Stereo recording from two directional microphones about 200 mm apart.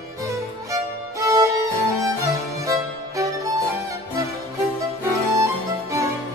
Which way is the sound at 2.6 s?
15° right (ahead or behind).